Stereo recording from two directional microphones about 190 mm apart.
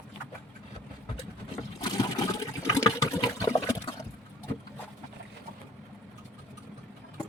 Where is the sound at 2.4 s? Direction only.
15° left (ahead or behind).